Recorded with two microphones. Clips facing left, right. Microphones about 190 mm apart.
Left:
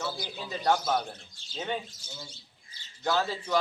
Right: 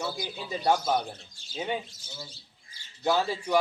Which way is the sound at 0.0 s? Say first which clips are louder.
Right 1 dB; 10° right (ahead or behind).